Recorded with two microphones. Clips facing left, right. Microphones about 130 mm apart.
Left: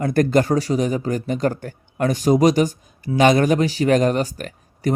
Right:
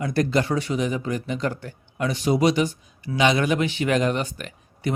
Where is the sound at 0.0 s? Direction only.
50° left (ahead or behind).